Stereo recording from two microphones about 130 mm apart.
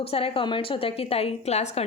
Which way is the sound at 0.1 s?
45° left (ahead or behind).